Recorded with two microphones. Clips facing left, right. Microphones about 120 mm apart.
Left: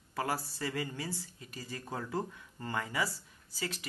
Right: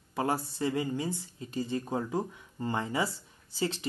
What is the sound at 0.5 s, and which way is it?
Speech, 20° right (ahead or behind).